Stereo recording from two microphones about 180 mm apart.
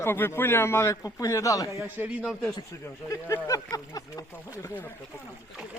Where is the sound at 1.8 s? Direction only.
10° right (ahead or behind).